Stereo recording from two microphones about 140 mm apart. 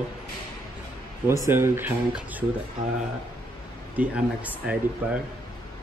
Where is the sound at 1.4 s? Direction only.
15° right (ahead or behind).